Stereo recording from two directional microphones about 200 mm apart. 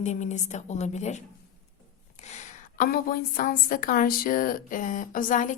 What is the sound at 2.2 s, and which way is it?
A woman's voice, 35° left (ahead or behind).